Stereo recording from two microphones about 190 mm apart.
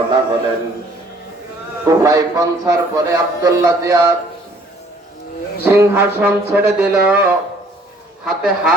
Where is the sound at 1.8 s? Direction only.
15° right (ahead or behind).